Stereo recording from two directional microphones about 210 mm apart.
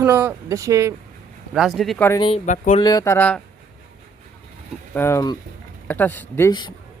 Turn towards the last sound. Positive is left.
turn(degrees=20)  # may be behind; listen again after turning